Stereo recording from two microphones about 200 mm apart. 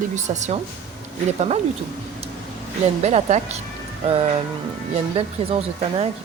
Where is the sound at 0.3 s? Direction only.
35° right (ahead or behind).